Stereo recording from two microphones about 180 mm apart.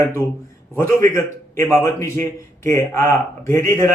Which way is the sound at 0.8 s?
15° left (ahead or behind).